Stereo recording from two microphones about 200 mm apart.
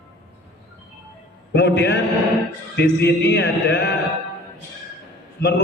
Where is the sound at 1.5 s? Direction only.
60° left (ahead or behind).